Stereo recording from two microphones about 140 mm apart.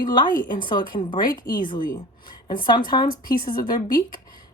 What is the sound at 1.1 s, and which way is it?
Speech, 90° left.